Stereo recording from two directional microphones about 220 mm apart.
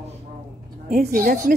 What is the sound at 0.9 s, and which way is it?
Speech, 40° right (ahead or behind).